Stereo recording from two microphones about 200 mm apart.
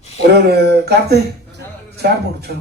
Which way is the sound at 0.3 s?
55° right (ahead or behind).